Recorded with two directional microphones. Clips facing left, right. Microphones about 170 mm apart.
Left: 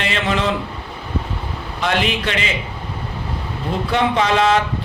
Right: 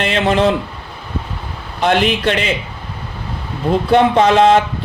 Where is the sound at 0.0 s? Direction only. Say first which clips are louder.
Right 6 dB; 45° right (ahead or behind).